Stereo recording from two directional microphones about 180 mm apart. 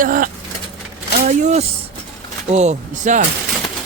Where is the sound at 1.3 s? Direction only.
40° right (ahead or behind).